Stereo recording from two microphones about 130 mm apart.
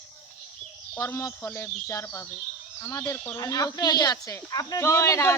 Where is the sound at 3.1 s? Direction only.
10° left (ahead or behind).